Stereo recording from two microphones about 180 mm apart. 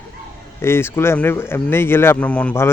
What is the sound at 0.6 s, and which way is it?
Speech, 15° left (ahead or behind).